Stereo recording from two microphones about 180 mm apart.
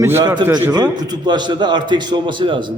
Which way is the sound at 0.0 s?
15° right (ahead or behind).